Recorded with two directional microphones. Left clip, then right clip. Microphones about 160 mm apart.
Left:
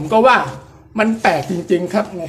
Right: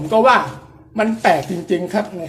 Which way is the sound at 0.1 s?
20° left (ahead or behind).